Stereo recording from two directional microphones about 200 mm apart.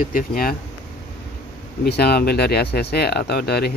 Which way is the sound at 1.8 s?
50° left (ahead or behind).